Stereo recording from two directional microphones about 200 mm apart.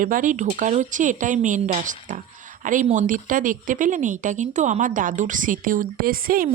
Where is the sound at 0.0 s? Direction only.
40° right (ahead or behind).